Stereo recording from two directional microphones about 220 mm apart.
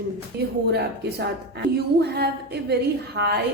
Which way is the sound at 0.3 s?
45° right (ahead or behind).